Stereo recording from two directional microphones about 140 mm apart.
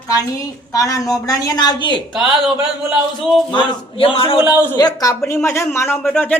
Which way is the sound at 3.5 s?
40° left (ahead or behind).